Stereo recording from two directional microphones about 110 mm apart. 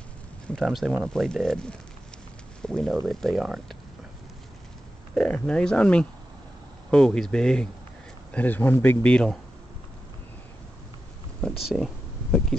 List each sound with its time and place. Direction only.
0.5 s speech: centre (ahead or behind)
5.1 s speech: 10° left (ahead or behind)
11.4 s a sound: centre (ahead or behind)